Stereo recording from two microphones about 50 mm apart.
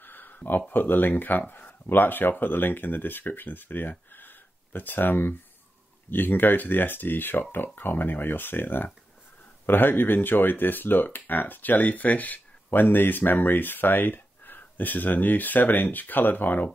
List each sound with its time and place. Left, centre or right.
0.0 s speech: left
4.1 s a sound: left
6.0 s speech: left